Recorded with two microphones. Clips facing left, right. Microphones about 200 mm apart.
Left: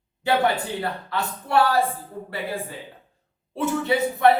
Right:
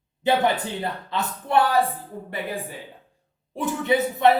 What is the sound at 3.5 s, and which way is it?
Speech, 15° right (ahead or behind).